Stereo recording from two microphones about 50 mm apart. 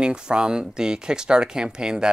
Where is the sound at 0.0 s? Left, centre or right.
Centre.